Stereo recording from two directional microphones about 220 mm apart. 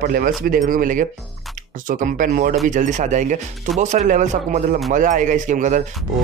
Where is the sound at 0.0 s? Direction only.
40° right (ahead or behind).